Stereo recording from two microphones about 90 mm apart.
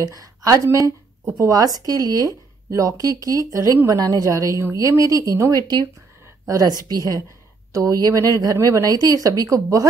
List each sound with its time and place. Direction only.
0.0 s a woman's voice: 40° right (ahead or behind)